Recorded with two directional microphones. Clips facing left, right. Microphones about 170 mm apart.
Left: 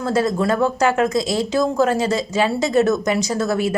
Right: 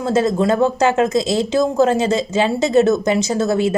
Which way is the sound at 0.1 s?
25° right (ahead or behind).